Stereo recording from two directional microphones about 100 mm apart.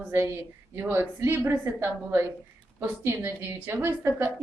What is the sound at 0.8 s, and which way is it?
A woman's voice, 20° right (ahead or behind).